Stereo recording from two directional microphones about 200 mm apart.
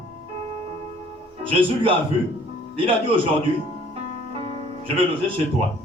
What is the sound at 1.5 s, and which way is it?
Speech, 25° right (ahead or behind).